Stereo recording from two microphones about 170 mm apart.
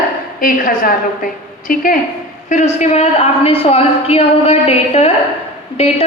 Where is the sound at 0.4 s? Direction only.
55° left (ahead or behind).